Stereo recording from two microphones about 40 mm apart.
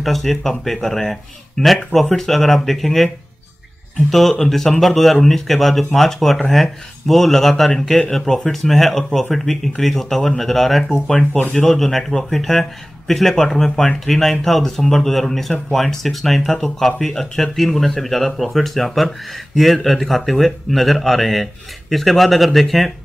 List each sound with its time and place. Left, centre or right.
0.0 s speech: centre
1.6 s speech: centre
2.0 s speech: centre
4.1 s speech: centre